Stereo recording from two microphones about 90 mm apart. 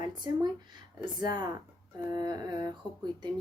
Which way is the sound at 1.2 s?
50° right (ahead or behind).